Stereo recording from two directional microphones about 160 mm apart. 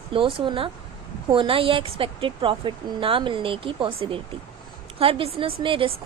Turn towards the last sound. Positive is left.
turn(degrees=-35)  # may be behind; listen again after turning